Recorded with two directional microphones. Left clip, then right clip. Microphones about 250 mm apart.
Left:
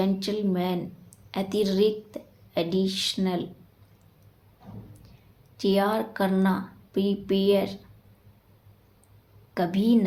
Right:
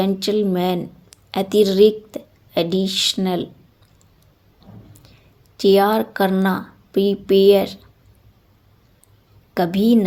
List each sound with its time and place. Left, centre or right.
0.0 s speech: right
5.5 s speech: right
9.6 s speech: right